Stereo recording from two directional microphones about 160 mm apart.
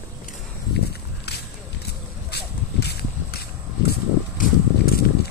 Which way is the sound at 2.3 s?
90° left.